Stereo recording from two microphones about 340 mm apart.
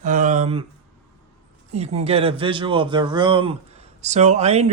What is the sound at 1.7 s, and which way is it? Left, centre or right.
A man's voice, centre.